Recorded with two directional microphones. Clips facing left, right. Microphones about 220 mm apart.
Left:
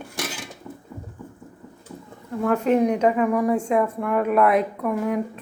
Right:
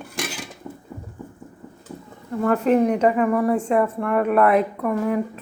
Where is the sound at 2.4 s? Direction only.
Centre (ahead or behind).